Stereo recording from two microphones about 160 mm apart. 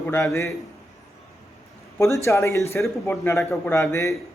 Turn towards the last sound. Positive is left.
turn(degrees=20)  # may be behind; listen again after turning